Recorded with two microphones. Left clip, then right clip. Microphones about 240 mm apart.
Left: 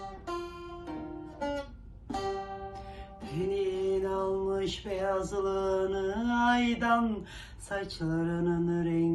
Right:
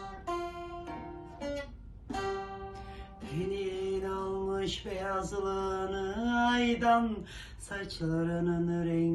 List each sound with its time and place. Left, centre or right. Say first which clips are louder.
0.3 s music: right 2 dB; right
2.1 s music: left 1 dB; centre
3.2 s music: left 4 dB; centre
3.8 s mantra: left 4 dB; centre